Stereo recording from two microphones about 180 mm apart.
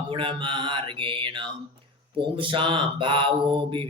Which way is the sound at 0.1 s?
30° right (ahead or behind).